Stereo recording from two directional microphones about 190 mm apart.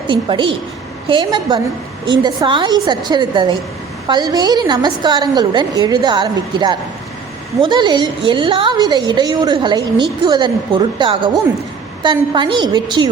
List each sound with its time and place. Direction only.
0.1 s a woman's voice: 25° right (ahead or behind)